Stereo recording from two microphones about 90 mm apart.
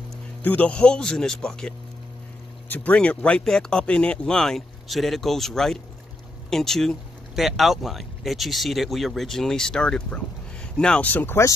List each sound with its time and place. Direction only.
0.4 s speech: 20° left (ahead or behind)
2.7 s speech: 15° left (ahead or behind)